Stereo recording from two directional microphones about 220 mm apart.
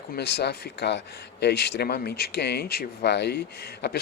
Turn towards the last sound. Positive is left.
turn(degrees=45)  # may be behind; listen again after turning